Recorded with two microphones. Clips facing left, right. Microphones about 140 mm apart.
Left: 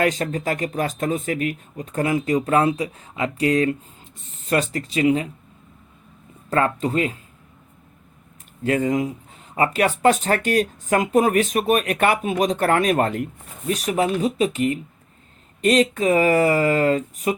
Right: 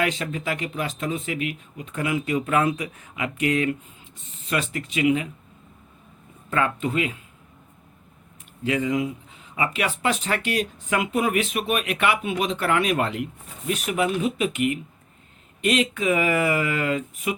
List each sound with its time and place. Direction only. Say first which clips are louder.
0.0 s speech: left 4 dB; 45° left (ahead or behind)
6.5 s speech: left 4 dB; 35° left (ahead or behind)
8.6 s speech: left 3 dB; 45° left (ahead or behind)